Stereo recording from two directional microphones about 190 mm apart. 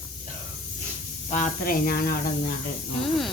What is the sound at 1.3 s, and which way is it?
Speech, 45° left (ahead or behind).